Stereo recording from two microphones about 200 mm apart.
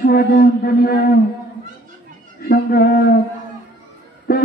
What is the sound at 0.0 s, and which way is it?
Speech, 50° left (ahead or behind).